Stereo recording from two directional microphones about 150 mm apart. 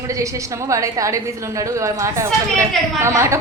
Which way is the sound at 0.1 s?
20° right (ahead or behind).